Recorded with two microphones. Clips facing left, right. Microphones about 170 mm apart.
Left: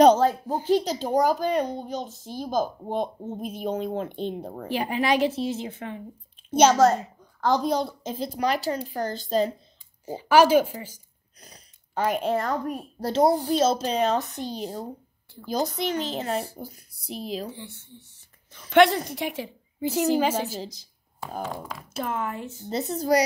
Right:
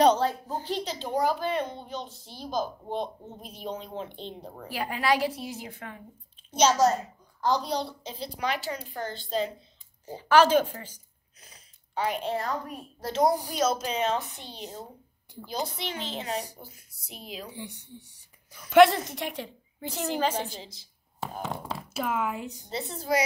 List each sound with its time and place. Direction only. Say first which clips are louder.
0.0 s a sound: left 5 dB; 45° left (ahead or behind)
0.7 s a child's voice: left 11 dB; 40° left (ahead or behind)
4.6 s a woman's voice: left 3 dB; 20° left (ahead or behind)
6.5 s a woman's voice: left 4 dB; 55° left (ahead or behind)
10.0 s a woman's voice: left 3 dB; 10° left (ahead or behind)
11.4 s speech: left 6 dB; 40° left (ahead or behind)
13.0 s a woman's voice: left 4 dB; 30° left (ahead or behind)
17.5 s speech: left 1 dB; 15° right (ahead or behind)
18.7 s a woman's voice: even; centre (ahead or behind)
20.6 s a woman's voice: left 10 dB; 40° left (ahead or behind)
21.2 s speech: left 2 dB; 30° right (ahead or behind)
22.0 s speech: even; 10° right (ahead or behind)
22.7 s a woman's voice: left 6 dB; 40° left (ahead or behind)